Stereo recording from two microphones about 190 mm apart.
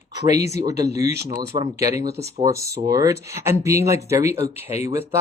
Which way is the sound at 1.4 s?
15° right (ahead or behind).